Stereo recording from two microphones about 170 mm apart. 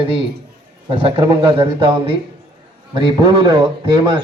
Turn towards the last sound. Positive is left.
turn(degrees=-25)  # may be behind; listen again after turning